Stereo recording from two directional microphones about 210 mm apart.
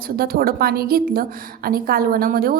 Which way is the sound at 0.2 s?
45° right (ahead or behind).